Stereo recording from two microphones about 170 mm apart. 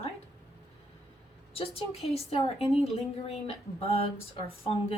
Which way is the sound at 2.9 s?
35° left (ahead or behind).